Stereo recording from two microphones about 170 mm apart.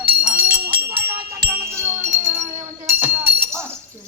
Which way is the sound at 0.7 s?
65° right (ahead or behind).